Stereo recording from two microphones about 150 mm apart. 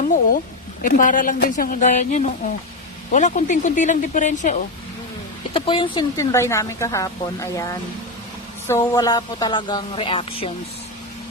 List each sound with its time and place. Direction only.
0.8 s speech: 60° left (ahead or behind)
5.5 s speech: 35° left (ahead or behind)
6.1 s a woman's voice: 20° left (ahead or behind); by 10.5 s 40° left (ahead or behind)